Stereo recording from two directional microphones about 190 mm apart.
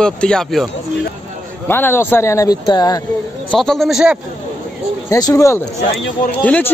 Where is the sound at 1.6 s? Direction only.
10° left (ahead or behind).